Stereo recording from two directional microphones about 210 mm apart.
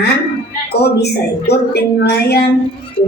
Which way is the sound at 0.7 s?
50° left (ahead or behind).